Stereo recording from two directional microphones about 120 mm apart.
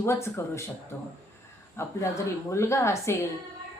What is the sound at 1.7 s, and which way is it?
A woman's voice, 25° left (ahead or behind).